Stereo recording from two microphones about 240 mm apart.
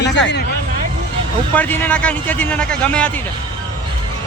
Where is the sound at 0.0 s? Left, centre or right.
Left.